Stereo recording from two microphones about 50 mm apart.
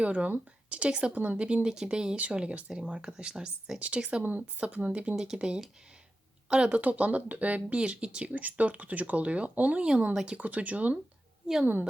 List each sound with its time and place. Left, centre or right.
0.0 s speech: right
1.5 s speech: centre
3.8 s speech: right
5.1 s speech: centre
6.7 s speech: right